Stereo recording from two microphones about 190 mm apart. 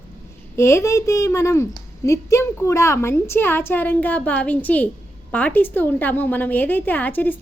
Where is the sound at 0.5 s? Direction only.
15° left (ahead or behind).